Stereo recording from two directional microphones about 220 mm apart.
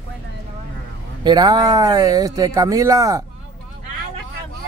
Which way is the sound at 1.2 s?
20° right (ahead or behind).